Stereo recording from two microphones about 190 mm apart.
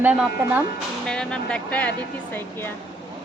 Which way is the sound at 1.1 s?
5° left (ahead or behind).